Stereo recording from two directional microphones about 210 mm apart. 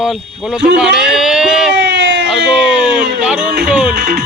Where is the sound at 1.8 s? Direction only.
55° right (ahead or behind).